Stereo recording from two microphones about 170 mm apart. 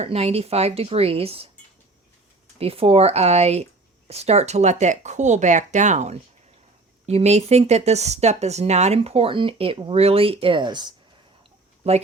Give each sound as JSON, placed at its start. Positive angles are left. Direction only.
{"t": 0.0, "sound": "speech", "side_deg": -35}
{"t": 2.6, "sound": "speech", "side_deg": -35}
{"t": 11.8, "sound": "speech", "side_deg": -35}